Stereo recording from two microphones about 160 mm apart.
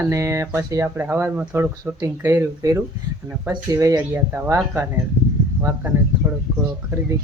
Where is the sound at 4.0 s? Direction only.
10° right (ahead or behind).